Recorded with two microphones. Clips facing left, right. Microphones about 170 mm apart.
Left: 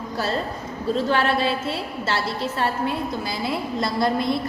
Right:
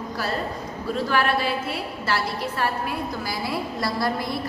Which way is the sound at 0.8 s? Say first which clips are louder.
Left 2 dB; 25° left (ahead or behind).